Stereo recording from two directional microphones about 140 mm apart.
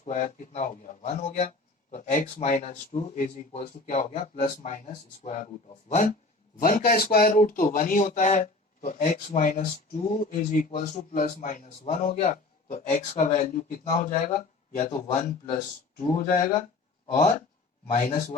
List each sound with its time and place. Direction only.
0.0 s speech: 60° left (ahead or behind)
5.2 s speech: 55° left (ahead or behind)
5.9 s a man's voice: 70° left (ahead or behind)
16.0 s speech: 65° left (ahead or behind)
17.1 s speech: 65° left (ahead or behind)